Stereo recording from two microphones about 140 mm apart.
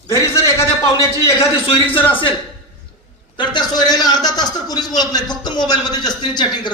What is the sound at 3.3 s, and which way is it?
A man's voice, 30° left (ahead or behind).